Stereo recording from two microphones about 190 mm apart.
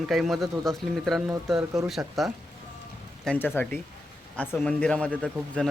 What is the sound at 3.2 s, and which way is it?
Speech, 10° left (ahead or behind).